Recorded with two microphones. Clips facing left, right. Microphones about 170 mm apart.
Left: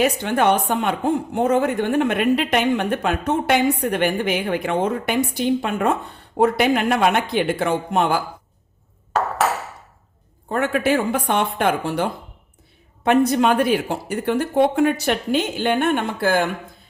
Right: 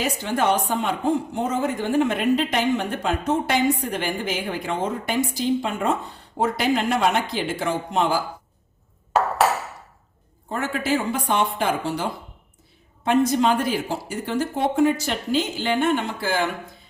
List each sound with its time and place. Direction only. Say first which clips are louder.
0.0 s a woman's voice: left 5 dB; 60° left (ahead or behind)
10.5 s a woman's voice: left 5 dB; 60° left (ahead or behind)
13.1 s a woman's voice: left 3 dB; 65° left (ahead or behind)